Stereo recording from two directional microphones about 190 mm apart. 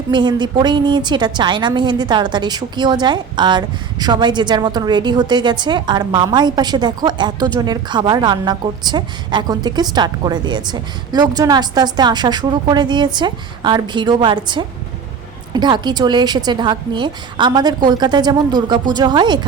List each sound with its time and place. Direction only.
0.1 s a woman's voice: 25° right (ahead or behind)